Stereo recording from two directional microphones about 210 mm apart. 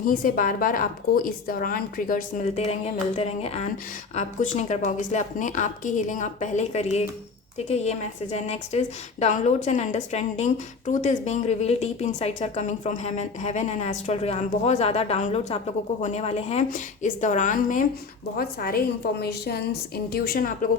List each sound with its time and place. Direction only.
0.0 s a woman's voice: 40° left (ahead or behind)